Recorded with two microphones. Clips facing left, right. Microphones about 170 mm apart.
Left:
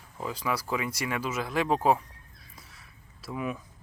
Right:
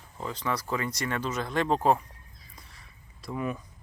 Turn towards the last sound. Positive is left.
turn(degrees=5)  # may be behind; listen again after turning